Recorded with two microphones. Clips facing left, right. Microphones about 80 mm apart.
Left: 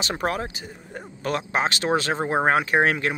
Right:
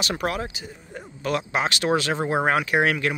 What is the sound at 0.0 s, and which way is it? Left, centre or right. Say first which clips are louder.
Speech: even; left.